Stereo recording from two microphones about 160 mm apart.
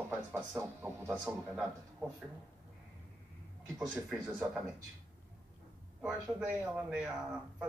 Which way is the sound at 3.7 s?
5° right (ahead or behind).